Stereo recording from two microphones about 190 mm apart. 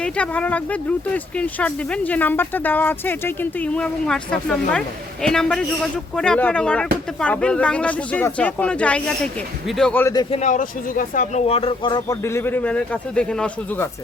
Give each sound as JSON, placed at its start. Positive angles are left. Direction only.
{"t": 0.0, "sound": "speech", "side_deg": 5}
{"t": 10.4, "sound": "speech", "side_deg": 45}